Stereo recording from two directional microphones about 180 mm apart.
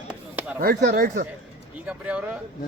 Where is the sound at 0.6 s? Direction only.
50° right (ahead or behind).